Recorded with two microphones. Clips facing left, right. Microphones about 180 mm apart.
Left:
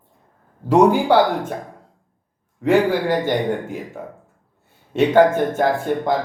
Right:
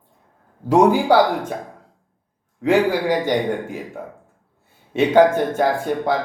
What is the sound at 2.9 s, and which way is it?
Speech, 15° right (ahead or behind).